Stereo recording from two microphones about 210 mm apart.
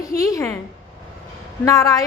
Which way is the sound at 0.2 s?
15° left (ahead or behind).